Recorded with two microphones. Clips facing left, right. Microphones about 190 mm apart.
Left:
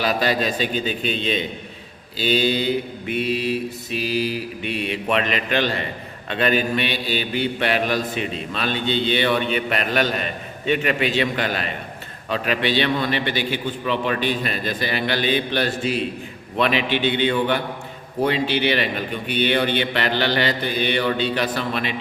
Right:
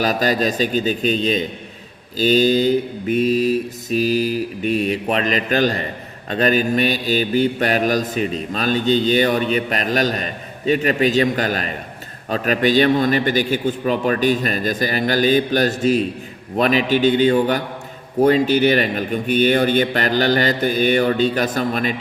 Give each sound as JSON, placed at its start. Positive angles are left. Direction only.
{"t": 0.0, "sound": "mantra", "side_deg": -45}
{"t": 2.1, "sound": "a man's voice", "side_deg": -40}
{"t": 6.3, "sound": "mantra", "side_deg": -40}
{"t": 12.3, "sound": "a man's voice", "side_deg": -45}
{"t": 16.6, "sound": "mantra", "side_deg": -40}
{"t": 18.2, "sound": "a man's voice", "side_deg": -45}